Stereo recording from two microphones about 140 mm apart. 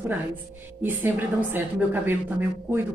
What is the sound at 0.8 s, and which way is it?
A woman's voice, 15° right (ahead or behind).